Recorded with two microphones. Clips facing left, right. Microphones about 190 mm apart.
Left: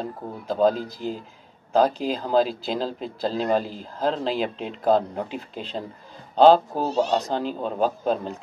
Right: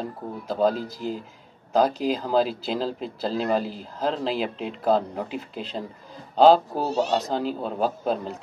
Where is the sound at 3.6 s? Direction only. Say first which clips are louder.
Right 2 dB; 45° left (ahead or behind).